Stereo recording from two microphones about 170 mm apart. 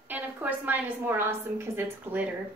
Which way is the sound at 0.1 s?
10° right (ahead or behind).